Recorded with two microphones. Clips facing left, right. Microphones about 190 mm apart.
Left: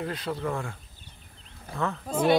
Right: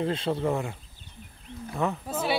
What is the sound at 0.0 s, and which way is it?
Speech, 25° right (ahead or behind).